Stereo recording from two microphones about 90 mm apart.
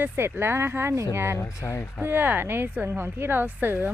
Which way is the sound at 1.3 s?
35° left (ahead or behind).